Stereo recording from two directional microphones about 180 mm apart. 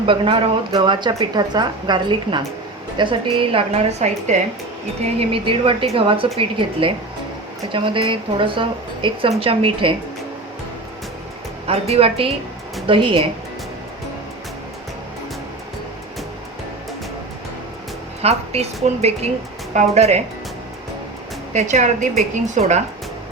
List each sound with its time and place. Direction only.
0.0 s a woman's voice: 30° right (ahead or behind)
5.3 s a woman's voice: 30° right (ahead or behind)
11.7 s a woman's voice: 35° right (ahead or behind)
18.2 s a woman's voice: 35° right (ahead or behind)
21.5 s a woman's voice: 40° right (ahead or behind)